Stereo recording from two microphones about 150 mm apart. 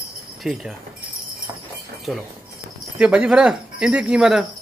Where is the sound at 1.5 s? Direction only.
25° right (ahead or behind).